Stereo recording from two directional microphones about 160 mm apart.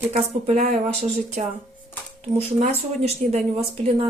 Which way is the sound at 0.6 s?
45° right (ahead or behind).